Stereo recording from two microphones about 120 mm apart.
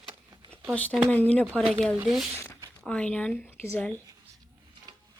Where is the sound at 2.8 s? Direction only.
10° left (ahead or behind).